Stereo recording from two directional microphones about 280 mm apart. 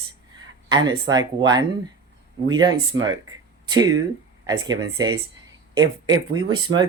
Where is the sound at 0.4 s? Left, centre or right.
Centre.